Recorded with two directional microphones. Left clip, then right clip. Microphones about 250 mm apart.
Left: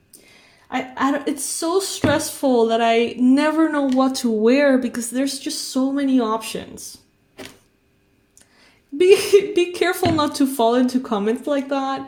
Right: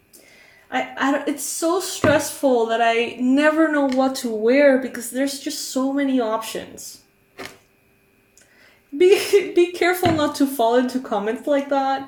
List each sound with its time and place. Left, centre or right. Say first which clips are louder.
0.7 s speech: even; left
9.0 s a woman's voice: left 2 dB; left